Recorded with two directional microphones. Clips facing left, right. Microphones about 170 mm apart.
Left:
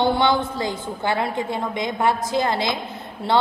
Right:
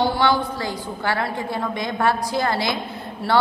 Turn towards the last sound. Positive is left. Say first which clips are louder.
# even
turn(degrees=20)  # may be behind; listen again after turning